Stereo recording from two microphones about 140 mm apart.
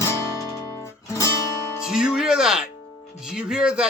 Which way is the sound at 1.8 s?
5° right (ahead or behind).